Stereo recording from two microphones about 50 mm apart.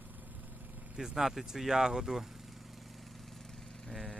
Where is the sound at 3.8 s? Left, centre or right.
Centre.